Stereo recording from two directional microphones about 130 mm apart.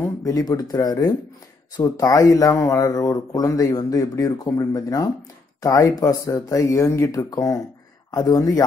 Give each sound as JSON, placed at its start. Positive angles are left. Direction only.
{"t": 0.2, "sound": "speech", "side_deg": 30}